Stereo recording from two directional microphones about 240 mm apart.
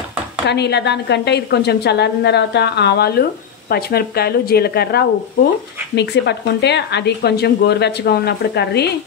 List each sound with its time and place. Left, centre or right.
0.5 s a woman's voice: left